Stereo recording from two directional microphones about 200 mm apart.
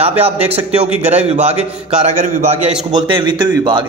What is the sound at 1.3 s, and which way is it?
A man's voice, 30° right (ahead or behind).